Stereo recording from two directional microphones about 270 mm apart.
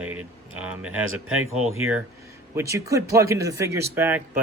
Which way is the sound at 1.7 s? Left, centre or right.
Right.